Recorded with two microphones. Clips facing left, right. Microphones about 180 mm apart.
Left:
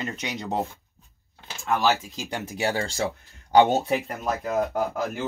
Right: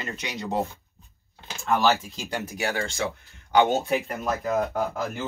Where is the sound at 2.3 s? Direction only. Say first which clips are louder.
Left 2 dB; 30° left (ahead or behind).